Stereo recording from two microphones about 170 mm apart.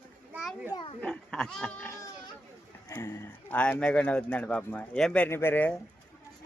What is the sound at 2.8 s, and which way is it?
A man's voice, 15° left (ahead or behind).